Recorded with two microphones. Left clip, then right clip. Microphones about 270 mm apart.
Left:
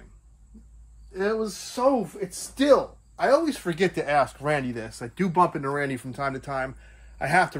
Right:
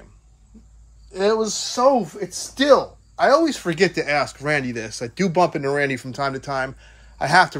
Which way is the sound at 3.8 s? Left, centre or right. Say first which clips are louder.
Right 3 dB; centre.